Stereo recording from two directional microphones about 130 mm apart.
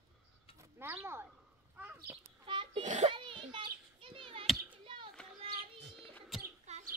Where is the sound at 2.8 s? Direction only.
70° right (ahead or behind).